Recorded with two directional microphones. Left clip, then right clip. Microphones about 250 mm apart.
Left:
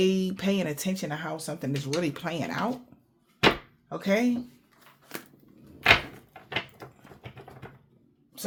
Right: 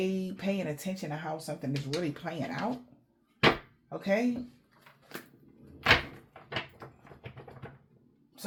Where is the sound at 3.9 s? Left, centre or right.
Left.